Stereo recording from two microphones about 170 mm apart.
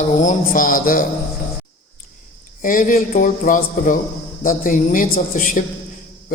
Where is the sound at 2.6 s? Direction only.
50° left (ahead or behind).